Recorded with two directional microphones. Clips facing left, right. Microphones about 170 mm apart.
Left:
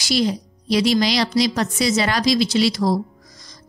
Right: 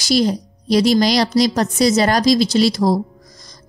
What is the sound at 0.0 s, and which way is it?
A woman's voice, 40° right (ahead or behind).